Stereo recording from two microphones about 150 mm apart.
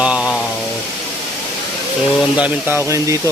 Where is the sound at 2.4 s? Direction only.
15° right (ahead or behind).